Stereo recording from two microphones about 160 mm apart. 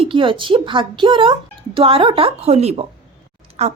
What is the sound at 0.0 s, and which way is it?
Speech, 35° right (ahead or behind).